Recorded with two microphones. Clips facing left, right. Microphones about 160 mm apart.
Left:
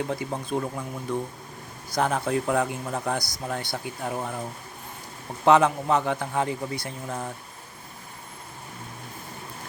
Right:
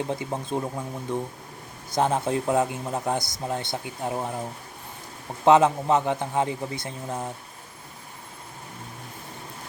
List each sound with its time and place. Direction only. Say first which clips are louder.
0.0 s speech: even; 20° right (ahead or behind)
5.5 s speech: right 1 dB; 20° right (ahead or behind)